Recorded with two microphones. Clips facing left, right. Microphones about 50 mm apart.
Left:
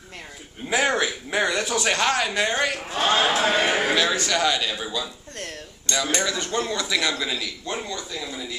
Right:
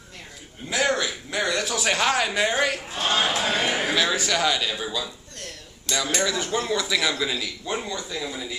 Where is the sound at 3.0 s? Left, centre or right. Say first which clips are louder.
Left 3 dB; left.